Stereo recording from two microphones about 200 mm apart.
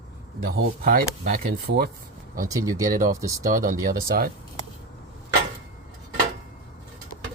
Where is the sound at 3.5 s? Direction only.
45° right (ahead or behind).